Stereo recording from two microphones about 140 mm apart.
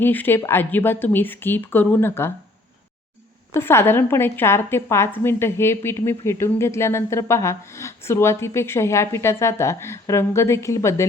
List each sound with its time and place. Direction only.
0.0 s speech: 15° left (ahead or behind)
3.5 s a woman's voice: 15° left (ahead or behind)